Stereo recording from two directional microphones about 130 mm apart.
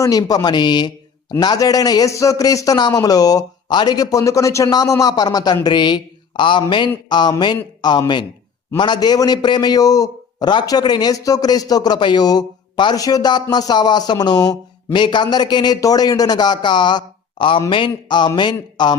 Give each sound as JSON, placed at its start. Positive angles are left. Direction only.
{"t": 0.0, "sound": "a man's voice", "side_deg": 30}